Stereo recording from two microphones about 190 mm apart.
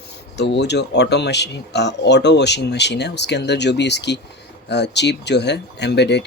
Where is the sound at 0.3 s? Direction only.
65° left (ahead or behind).